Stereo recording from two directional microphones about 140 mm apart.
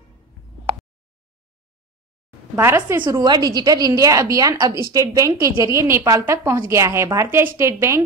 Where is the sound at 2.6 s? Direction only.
20° right (ahead or behind).